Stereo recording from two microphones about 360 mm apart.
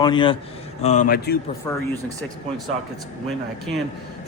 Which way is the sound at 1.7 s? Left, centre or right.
Centre.